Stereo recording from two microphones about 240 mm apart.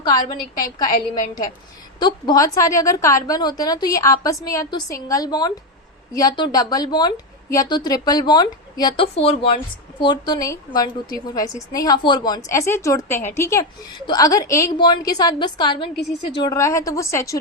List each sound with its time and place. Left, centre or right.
0.0 s a woman's voice: centre
2.0 s a woman's voice: centre